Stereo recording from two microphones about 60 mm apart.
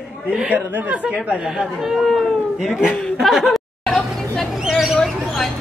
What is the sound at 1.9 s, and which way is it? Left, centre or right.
Speech, centre.